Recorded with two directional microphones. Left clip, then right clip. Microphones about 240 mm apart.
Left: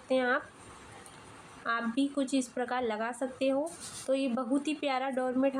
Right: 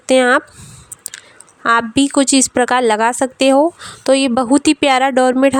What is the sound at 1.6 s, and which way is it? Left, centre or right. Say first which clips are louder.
A woman's voice: right 18 dB; right.